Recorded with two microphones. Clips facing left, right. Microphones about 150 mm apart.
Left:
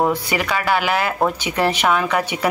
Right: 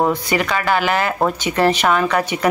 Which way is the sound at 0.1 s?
10° left (ahead or behind).